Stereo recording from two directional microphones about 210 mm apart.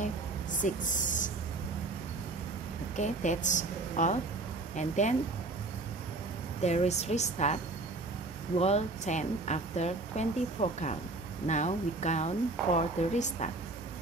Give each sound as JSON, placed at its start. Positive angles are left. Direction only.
{"t": 0.0, "sound": "a sound", "side_deg": 35}
{"t": 3.0, "sound": "speech", "side_deg": 35}
{"t": 6.6, "sound": "speech", "side_deg": 30}
{"t": 8.5, "sound": "speech", "side_deg": 30}